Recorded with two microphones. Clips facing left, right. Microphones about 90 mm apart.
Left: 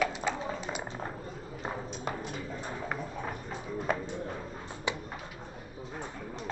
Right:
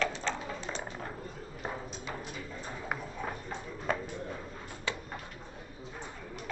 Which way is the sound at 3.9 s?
5° left (ahead or behind).